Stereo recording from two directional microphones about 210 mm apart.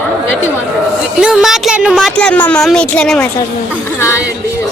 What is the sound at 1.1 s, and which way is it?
Speech, 5° right (ahead or behind).